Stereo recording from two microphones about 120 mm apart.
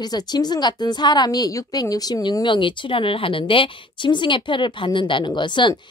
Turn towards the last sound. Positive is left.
turn(degrees=40)  # may be behind; listen again after turning